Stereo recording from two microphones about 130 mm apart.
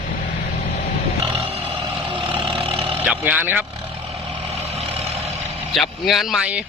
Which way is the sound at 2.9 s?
15° right (ahead or behind).